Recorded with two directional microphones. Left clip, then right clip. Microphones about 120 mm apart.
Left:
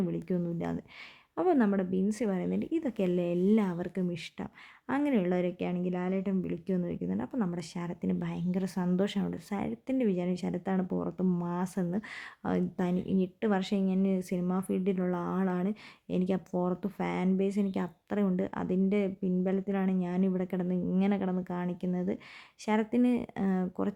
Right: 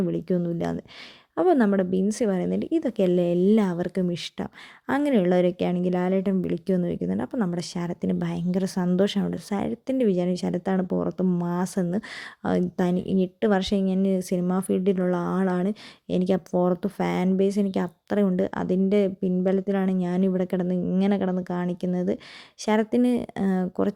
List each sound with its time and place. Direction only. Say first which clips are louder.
0.0 s speech: right 8 dB; 35° right (ahead or behind)